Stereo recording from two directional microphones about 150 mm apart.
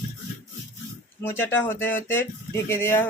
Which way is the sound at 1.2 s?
15° left (ahead or behind).